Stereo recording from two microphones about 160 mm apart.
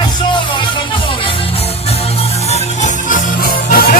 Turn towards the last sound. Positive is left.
turn(degrees=65)  # may be behind; listen again after turning